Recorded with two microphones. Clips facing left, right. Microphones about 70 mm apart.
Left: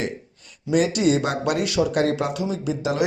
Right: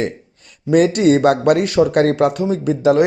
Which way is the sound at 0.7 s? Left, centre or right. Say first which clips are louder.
Right 7 dB; right.